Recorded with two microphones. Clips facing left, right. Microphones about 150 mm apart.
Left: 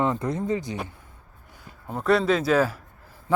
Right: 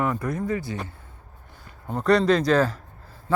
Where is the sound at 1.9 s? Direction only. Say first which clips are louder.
Right 2 dB; 5° left (ahead or behind).